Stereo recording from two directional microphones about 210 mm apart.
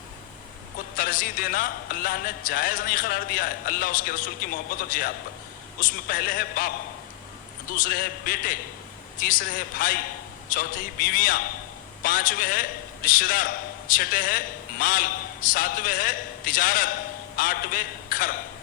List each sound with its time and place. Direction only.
0.9 s a man's voice: 40° left (ahead or behind)